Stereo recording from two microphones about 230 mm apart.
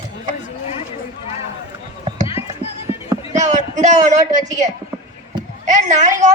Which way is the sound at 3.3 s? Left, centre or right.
Right.